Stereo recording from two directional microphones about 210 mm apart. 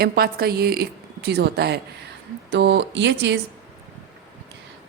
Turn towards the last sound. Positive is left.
turn(degrees=-55)  # may be behind; listen again after turning